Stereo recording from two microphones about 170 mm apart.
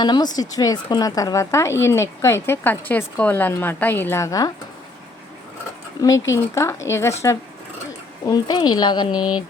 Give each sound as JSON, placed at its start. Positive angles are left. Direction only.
{"t": 0.0, "sound": "speech", "side_deg": 25}
{"t": 6.3, "sound": "speech", "side_deg": 15}